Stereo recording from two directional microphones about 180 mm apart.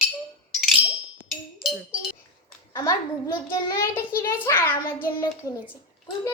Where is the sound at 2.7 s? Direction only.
15° left (ahead or behind).